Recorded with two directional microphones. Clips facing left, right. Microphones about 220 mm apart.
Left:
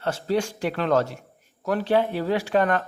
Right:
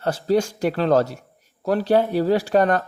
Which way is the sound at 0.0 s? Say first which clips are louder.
Right 4 dB; 40° right (ahead or behind).